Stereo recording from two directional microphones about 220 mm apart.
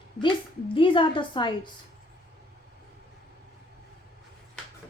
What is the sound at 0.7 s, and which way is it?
Speech, 25° left (ahead or behind).